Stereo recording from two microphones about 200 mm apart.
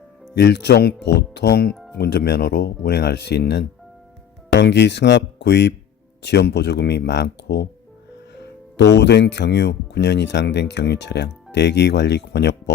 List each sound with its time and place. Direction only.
0.3 s speech: 55° left (ahead or behind)
8.8 s speech: 60° left (ahead or behind)